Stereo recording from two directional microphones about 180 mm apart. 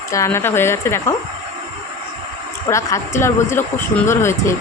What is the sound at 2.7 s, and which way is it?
Speech, 15° left (ahead or behind).